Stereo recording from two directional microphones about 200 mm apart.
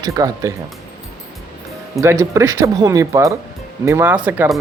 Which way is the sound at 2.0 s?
15° right (ahead or behind).